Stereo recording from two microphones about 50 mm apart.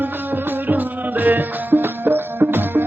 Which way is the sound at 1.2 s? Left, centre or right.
Right.